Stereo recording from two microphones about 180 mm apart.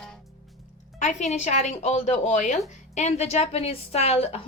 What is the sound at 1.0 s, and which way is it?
A woman's voice, 40° left (ahead or behind).